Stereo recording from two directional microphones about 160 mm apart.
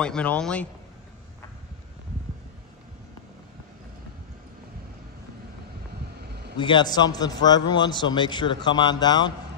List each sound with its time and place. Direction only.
0.0 s a man's voice: 5° left (ahead or behind)
6.2 s a sound: 90° right
6.5 s a man's voice: 30° left (ahead or behind)